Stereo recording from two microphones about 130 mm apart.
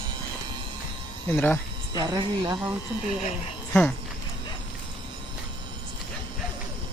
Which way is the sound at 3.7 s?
10° left (ahead or behind).